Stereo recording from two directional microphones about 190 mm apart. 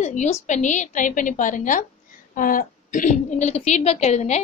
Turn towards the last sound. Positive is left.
turn(degrees=35)  # may be behind; listen again after turning